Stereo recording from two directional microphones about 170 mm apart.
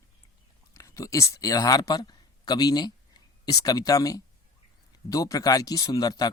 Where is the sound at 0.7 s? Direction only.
20° left (ahead or behind).